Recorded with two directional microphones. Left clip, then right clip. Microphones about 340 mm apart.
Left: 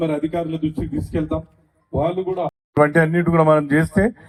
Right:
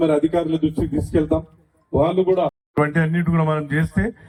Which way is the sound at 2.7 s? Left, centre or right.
Centre.